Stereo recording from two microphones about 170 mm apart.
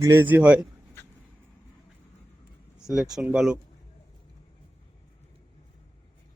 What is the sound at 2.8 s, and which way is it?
Speech, centre (ahead or behind).